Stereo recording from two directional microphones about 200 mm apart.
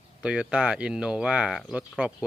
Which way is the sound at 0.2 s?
5° right (ahead or behind).